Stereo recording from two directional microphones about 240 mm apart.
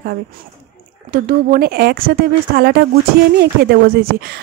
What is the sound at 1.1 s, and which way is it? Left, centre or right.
Speech, right.